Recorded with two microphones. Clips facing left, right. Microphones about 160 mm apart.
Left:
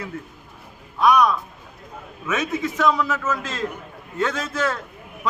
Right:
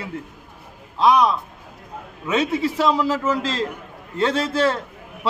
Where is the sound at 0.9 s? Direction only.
30° right (ahead or behind).